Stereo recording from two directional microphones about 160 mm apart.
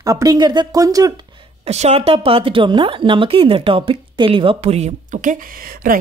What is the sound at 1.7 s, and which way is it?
Speech, 45° right (ahead or behind).